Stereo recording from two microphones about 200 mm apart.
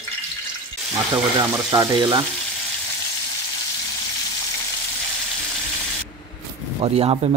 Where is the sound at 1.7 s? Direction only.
20° right (ahead or behind).